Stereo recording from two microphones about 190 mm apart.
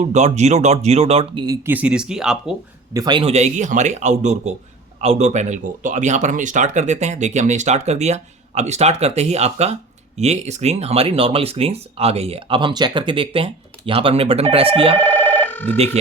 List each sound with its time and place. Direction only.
0.0 s speech: 35° right (ahead or behind)
1.6 s speech: 10° right (ahead or behind)
2.9 s speech: 20° right (ahead or behind)
14.9 s telephone bell ringing: 10° left (ahead or behind)